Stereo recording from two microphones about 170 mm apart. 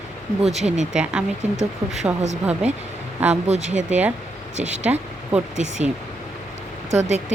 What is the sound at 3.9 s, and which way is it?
Speech, 10° right (ahead or behind).